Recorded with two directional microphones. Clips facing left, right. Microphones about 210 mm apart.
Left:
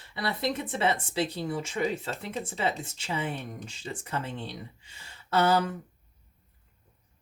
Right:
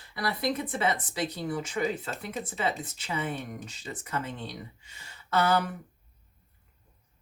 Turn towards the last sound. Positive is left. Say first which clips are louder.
# left 1 dB
turn(degrees=30)  # may be behind; listen again after turning